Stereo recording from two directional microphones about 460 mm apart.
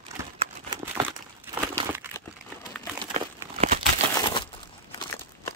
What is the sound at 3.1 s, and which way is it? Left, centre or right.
Crumpling, centre.